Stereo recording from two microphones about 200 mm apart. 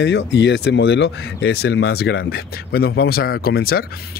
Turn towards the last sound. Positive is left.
turn(degrees=50)  # may be behind; listen again after turning